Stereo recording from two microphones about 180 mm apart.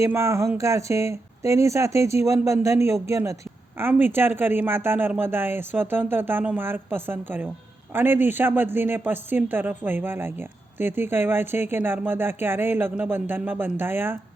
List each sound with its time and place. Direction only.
0.0 s speech: 15° right (ahead or behind)